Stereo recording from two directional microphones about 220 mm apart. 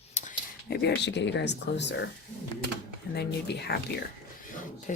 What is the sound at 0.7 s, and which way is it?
Speech, 50° left (ahead or behind).